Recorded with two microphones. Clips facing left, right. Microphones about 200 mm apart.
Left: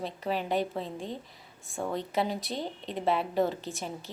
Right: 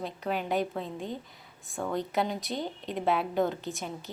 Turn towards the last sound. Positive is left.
turn(degrees=0)  # may be behind; listen again after turning